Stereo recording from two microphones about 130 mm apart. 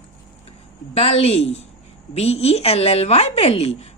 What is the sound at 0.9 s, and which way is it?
Speech, 50° left (ahead or behind).